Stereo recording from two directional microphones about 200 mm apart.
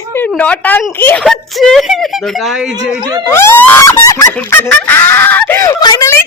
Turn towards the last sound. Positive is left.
turn(degrees=15)  # may be behind; listen again after turning